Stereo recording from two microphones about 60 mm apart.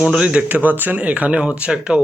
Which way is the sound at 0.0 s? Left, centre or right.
Centre.